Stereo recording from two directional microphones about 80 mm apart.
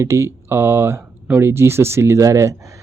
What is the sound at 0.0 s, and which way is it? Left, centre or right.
Speech, right.